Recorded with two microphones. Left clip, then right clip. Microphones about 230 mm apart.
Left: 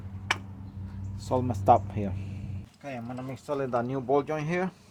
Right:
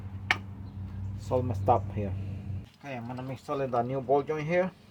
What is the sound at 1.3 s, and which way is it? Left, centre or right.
Speech, left.